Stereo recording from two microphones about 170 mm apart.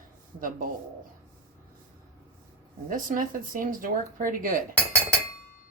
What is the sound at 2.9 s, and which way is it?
Speech, 55° right (ahead or behind).